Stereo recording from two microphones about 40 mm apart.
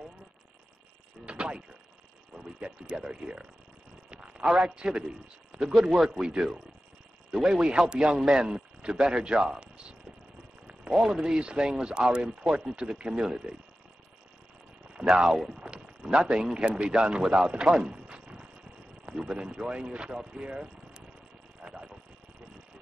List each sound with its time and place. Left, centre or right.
1.2 s a sound: right
2.3 s a man's voice: right
5.6 s speech: centre
6.1 s speech: centre
10.9 s speech: centre
12.4 s speech: centre
12.7 s speech: right
15.2 s speech: centre
15.5 s a sound: right
16.5 s speech: right
17.6 s speech: centre
17.9 s a sound: right
19.0 s speech: centre
21.6 s a sound: centre